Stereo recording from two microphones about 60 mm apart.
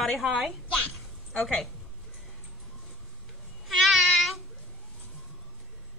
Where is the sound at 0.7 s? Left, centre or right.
Left.